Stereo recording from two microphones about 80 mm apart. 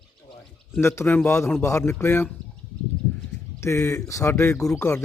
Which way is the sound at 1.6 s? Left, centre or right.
Left.